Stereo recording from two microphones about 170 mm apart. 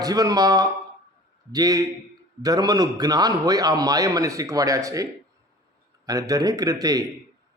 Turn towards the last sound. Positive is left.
turn(degrees=-20)  # may be behind; listen again after turning